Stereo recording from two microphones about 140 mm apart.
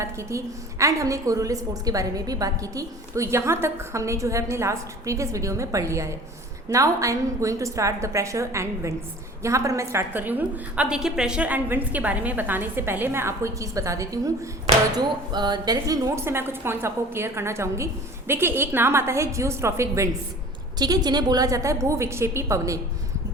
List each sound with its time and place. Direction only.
0.0 s a woman's voice: 20° right (ahead or behind)